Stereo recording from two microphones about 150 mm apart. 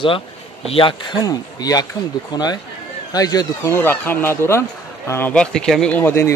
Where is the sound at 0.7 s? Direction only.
35° left (ahead or behind); by 5.3 s 15° left (ahead or behind).